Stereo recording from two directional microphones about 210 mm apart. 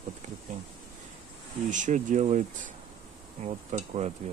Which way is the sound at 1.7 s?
35° right (ahead or behind).